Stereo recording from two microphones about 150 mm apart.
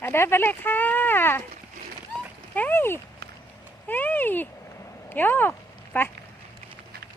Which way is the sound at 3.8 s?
10° left (ahead or behind).